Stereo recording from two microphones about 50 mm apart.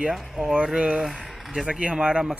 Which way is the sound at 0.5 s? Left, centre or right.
Centre.